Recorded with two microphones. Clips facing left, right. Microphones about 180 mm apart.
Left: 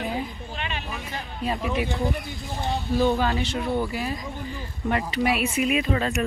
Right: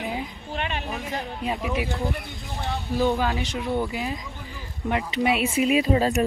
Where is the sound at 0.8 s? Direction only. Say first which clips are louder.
Right 4 dB; 35° right (ahead or behind).